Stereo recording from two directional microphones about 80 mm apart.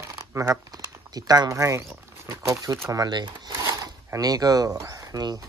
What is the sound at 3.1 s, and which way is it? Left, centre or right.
Speech, right.